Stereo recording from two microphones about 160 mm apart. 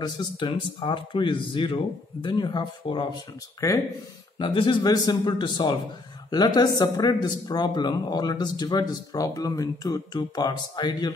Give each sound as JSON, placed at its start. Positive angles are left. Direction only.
{"t": 0.0, "sound": "speech", "side_deg": 30}
{"t": 4.4, "sound": "speech", "side_deg": 30}